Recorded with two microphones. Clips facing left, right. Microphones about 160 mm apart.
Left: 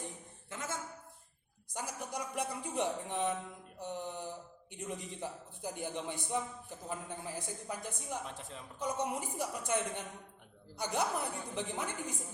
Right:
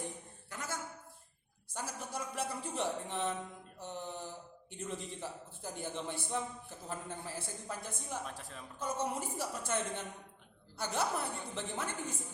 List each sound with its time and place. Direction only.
0.5 s a woman's voice: 20° left (ahead or behind)